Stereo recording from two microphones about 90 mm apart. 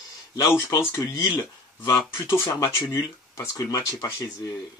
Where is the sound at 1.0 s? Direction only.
45° left (ahead or behind).